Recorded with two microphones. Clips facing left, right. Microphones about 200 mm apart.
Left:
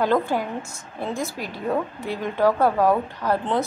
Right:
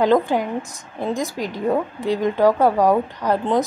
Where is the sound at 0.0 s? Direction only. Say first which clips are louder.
Right 4 dB; 15° right (ahead or behind).